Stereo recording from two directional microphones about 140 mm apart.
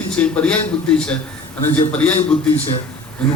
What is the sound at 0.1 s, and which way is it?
A man's voice, 10° left (ahead or behind).